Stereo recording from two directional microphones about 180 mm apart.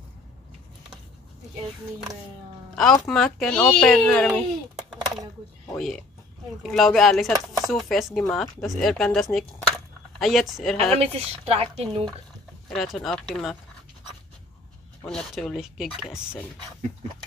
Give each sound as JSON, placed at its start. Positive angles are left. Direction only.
{"t": 2.7, "sound": "speech", "side_deg": 5}
{"t": 5.8, "sound": "speech", "side_deg": 0}
{"t": 10.9, "sound": "speech", "side_deg": -35}
{"t": 12.6, "sound": "speech", "side_deg": 0}
{"t": 15.0, "sound": "speech", "side_deg": 5}